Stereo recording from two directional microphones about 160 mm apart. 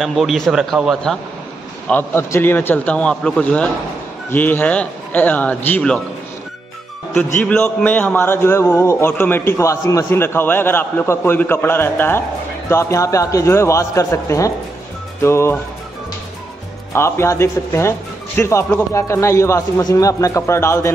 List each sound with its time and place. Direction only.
0.0 s a man's voice: centre (ahead or behind)
1.9 s a man's voice: 15° left (ahead or behind)
7.3 s a man's voice: 10° left (ahead or behind)
16.9 s a man's voice: 15° left (ahead or behind)